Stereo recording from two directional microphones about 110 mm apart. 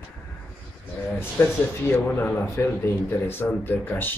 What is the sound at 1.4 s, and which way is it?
Speech, 20° left (ahead or behind).